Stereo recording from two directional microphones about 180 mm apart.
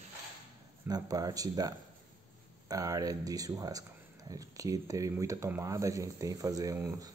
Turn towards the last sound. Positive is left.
turn(degrees=-20)  # may be behind; listen again after turning